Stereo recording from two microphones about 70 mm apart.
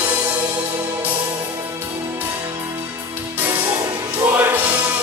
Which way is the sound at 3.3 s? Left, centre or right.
Right.